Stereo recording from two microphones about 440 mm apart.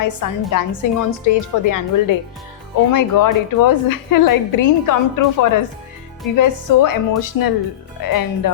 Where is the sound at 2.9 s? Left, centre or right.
Left.